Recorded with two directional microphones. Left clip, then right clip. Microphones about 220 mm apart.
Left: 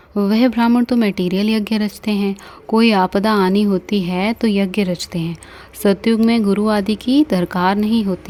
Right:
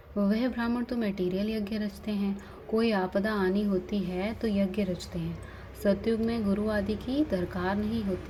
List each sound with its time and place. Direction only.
0.2 s speech: 50° left (ahead or behind)